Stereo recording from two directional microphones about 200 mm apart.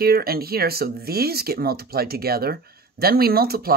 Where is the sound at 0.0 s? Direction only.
50° right (ahead or behind).